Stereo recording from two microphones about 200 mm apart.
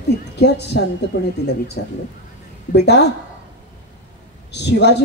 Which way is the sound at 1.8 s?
50° left (ahead or behind).